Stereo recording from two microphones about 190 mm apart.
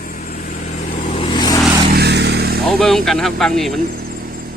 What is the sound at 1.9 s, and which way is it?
Vehicle, 60° right (ahead or behind).